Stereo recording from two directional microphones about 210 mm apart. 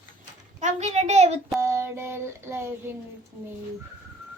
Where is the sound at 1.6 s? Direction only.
10° right (ahead or behind).